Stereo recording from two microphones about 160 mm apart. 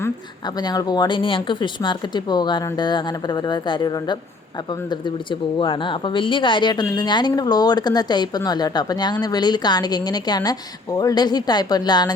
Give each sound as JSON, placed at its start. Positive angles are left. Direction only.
{"t": 0.4, "sound": "speech", "side_deg": 25}